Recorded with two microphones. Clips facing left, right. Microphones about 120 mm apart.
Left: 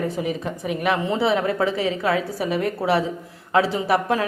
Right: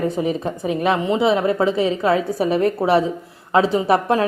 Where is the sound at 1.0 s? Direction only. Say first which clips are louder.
Right 3 dB; 20° right (ahead or behind).